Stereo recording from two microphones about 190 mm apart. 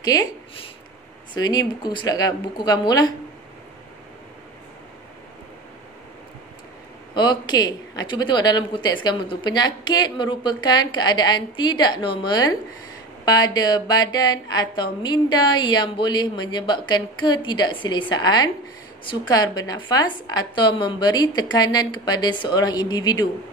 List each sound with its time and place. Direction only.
0.0 s speech: 20° left (ahead or behind)
7.2 s speech: 20° left (ahead or behind)